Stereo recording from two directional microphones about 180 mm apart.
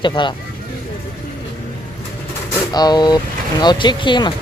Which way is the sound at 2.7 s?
20° left (ahead or behind).